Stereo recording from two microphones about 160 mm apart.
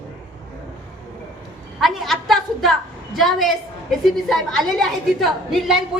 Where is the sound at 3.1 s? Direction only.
Centre (ahead or behind).